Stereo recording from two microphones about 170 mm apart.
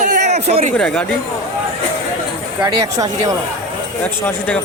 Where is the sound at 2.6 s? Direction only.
20° right (ahead or behind).